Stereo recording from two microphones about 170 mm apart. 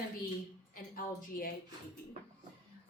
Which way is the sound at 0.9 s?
60° left (ahead or behind).